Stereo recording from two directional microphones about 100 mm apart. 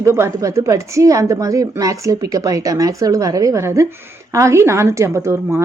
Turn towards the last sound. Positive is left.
turn(degrees=-25)  # may be behind; listen again after turning